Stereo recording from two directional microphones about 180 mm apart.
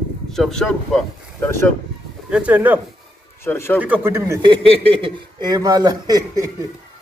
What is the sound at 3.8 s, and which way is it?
Speech, 10° right (ahead or behind).